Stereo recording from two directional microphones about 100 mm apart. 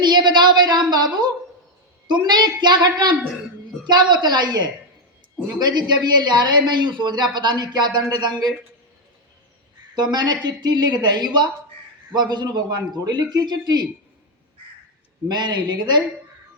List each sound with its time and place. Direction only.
0.0 s a woman's voice: 50° right (ahead or behind)
9.9 s a man's voice: 45° right (ahead or behind)
15.3 s a man's voice: 45° right (ahead or behind)